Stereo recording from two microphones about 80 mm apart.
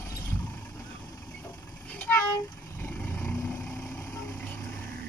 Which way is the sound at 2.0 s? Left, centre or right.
Left.